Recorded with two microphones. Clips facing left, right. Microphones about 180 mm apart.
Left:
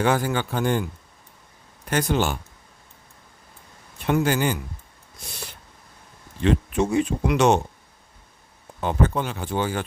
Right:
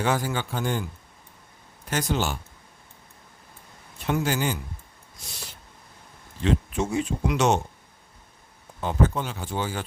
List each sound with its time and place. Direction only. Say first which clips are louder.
0.0 s speech: left 4 dB; 60° left (ahead or behind)
1.9 s speech: left 4 dB; 60° left (ahead or behind)
4.0 s speech: left 4 dB; 60° left (ahead or behind)
6.4 s speech: left 4 dB; 60° left (ahead or behind)
8.8 s speech: left 2 dB; 60° left (ahead or behind)